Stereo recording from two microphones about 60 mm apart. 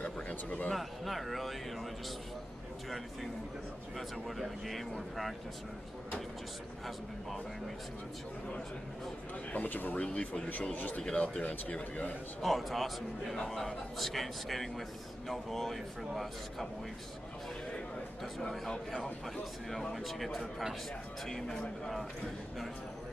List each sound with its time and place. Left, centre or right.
0.0 s a sound: left
0.7 s a man's voice: centre
4.4 s a man's voice: centre
9.5 s speech: left
10.1 s a man's voice: centre
10.6 s speech: left
12.4 s a man's voice: centre
18.5 s a man's voice: centre